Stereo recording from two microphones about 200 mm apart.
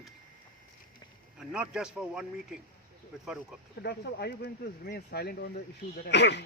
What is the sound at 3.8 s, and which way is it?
Speech, 55° left (ahead or behind).